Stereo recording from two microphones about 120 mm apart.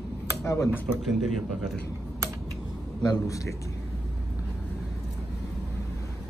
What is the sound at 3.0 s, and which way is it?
Speech, 30° left (ahead or behind).